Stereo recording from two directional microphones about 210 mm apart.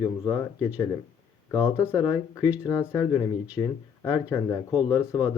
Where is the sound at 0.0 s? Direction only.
10° left (ahead or behind).